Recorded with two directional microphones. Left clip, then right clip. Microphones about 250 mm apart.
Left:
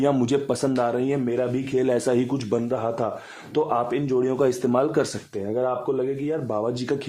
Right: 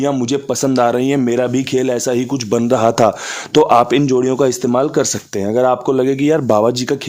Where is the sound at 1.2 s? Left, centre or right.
Right.